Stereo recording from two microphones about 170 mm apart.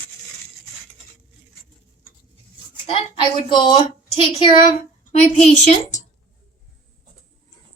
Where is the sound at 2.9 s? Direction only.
30° left (ahead or behind).